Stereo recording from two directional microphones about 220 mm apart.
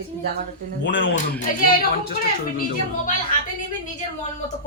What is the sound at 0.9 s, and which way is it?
Speech, 55° left (ahead or behind).